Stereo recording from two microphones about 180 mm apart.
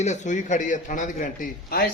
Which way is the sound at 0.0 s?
40° left (ahead or behind).